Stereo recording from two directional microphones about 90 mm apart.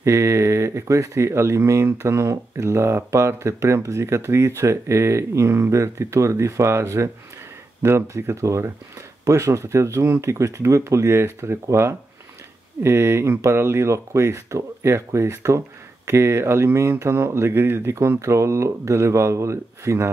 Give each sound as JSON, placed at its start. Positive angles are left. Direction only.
{"t": 0.0, "sound": "speech", "side_deg": -35}